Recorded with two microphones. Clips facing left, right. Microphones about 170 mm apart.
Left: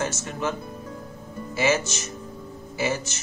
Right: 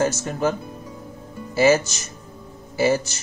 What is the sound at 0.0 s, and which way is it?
Speech, 40° right (ahead or behind).